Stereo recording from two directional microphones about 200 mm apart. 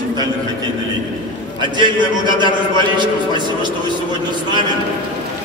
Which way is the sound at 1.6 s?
25° right (ahead or behind).